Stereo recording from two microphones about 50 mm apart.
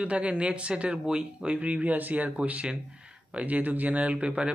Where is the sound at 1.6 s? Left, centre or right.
Right.